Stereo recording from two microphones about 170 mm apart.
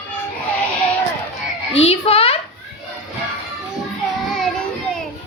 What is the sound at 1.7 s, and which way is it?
Speech, 35° left (ahead or behind).